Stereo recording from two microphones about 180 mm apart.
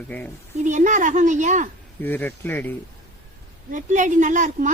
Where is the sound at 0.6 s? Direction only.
45° right (ahead or behind).